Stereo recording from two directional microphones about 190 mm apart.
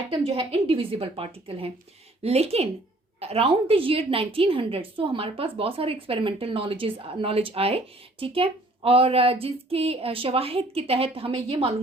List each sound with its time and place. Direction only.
0.2 s a woman's voice: 30° right (ahead or behind)